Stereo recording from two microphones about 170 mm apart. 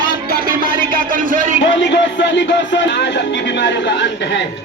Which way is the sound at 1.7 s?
90° left.